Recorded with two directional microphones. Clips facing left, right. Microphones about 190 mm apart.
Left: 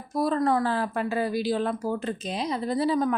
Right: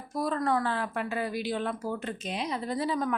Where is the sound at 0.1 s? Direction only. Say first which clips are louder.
Left 4 dB; 35° left (ahead or behind).